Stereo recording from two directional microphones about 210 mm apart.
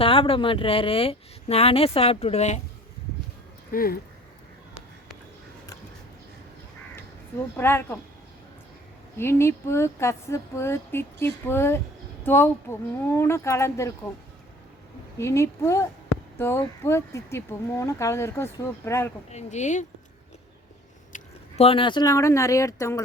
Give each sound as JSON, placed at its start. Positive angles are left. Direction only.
{"t": 0.0, "sound": "speech", "side_deg": 25}
{"t": 3.7, "sound": "speech", "side_deg": 45}
{"t": 7.5, "sound": "speech", "side_deg": 10}
{"t": 9.1, "sound": "speech", "side_deg": 10}
{"t": 15.2, "sound": "speech", "side_deg": 15}
{"t": 19.3, "sound": "speech", "side_deg": 35}
{"t": 21.1, "sound": "speech", "side_deg": 30}